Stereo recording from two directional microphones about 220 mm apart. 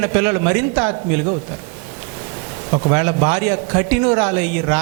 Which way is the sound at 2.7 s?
25° right (ahead or behind).